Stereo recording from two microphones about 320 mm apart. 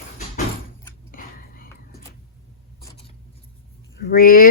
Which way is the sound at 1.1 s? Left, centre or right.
Left.